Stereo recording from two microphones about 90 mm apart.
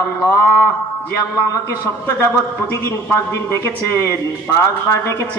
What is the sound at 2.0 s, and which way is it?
A man's voice, 35° left (ahead or behind).